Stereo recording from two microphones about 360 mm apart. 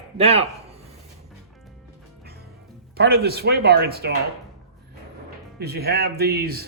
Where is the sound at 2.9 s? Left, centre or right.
Right.